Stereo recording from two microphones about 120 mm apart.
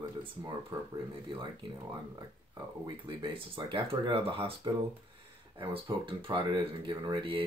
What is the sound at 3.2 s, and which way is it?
Speech, 45° right (ahead or behind).